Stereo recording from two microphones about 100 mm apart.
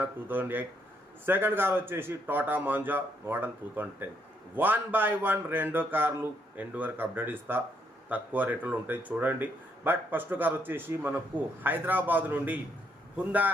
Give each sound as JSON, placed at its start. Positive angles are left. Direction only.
{"t": 0.0, "sound": "a man's voice", "side_deg": -20}